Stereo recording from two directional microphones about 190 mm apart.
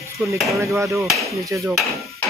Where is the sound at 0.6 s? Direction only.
15° right (ahead or behind).